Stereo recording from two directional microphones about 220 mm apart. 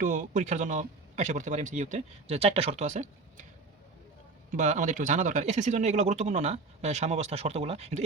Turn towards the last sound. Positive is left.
turn(degrees=-30)  # may be behind; listen again after turning